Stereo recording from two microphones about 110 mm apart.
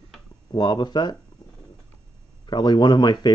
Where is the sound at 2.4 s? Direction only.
40° left (ahead or behind).